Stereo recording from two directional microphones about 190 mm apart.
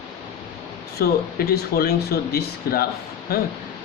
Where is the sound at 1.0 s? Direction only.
55° left (ahead or behind).